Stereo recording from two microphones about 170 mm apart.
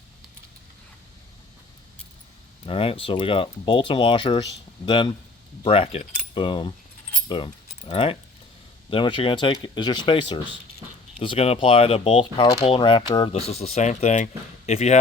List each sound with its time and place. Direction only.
2.6 s speech: 30° left (ahead or behind)
13.3 s speech: 40° left (ahead or behind)